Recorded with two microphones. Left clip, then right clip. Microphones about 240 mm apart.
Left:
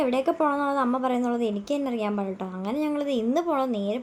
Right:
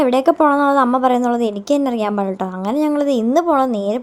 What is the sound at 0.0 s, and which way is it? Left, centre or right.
A woman's voice, right.